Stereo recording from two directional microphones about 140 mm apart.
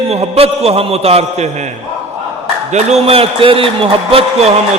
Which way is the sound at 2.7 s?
50° right (ahead or behind).